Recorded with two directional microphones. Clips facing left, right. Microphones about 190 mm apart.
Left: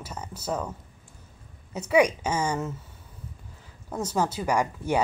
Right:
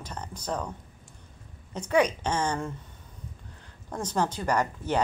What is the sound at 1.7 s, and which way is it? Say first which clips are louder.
Speech: left 3 dB; 10° left (ahead or behind).